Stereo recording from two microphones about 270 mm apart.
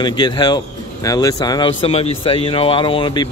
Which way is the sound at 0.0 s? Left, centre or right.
Centre.